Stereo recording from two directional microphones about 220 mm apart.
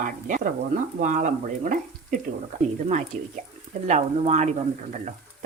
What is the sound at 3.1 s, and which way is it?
Speech, 30° right (ahead or behind).